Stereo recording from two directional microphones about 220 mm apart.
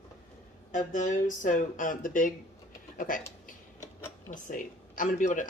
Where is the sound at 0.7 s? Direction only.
35° left (ahead or behind).